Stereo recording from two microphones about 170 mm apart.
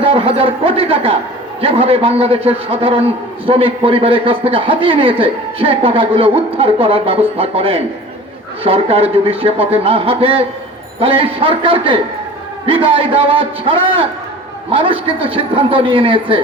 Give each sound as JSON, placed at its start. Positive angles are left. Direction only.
{"t": 0.0, "sound": "a man's voice", "side_deg": -35}